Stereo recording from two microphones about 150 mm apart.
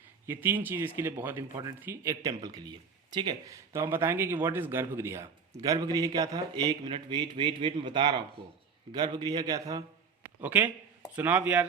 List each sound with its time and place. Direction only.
0.3 s speech: 15° right (ahead or behind)
10.4 s speech: 10° right (ahead or behind)